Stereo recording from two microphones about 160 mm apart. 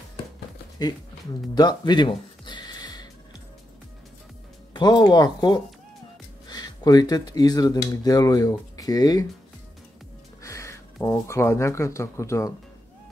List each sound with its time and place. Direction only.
1.5 s music: 25° left (ahead or behind)
4.7 s speech: 25° left (ahead or behind)
10.4 s speech: 20° left (ahead or behind)